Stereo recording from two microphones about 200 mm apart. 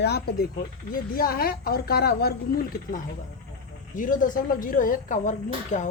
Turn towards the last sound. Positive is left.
turn(degrees=35)  # may be behind; listen again after turning